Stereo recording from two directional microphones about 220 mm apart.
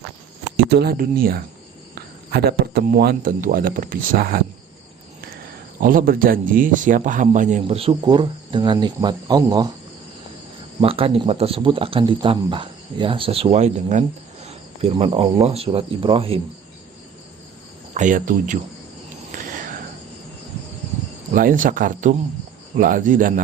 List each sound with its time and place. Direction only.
0.5 s a man's voice: 50° right (ahead or behind)
5.8 s a man's voice: 40° right (ahead or behind); by 9.6 s 20° right (ahead or behind)
10.8 s speech: 25° right (ahead or behind)
17.9 s a man's voice: 35° right (ahead or behind)
19.3 s cricket: 40° right (ahead or behind)
21.3 s a man's voice: 40° right (ahead or behind)